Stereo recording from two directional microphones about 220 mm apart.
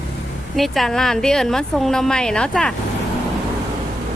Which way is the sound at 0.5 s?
Centre (ahead or behind).